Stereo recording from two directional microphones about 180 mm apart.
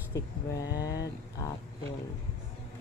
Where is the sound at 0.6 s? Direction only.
20° left (ahead or behind).